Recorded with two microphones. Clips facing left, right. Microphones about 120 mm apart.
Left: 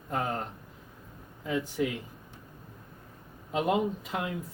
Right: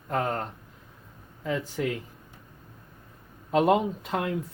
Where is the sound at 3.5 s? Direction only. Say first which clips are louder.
Right 5 dB; 85° right.